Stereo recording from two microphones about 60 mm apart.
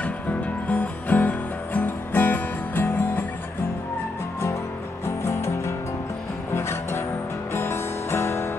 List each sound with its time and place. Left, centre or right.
0.7 s music: left
5.0 s music: left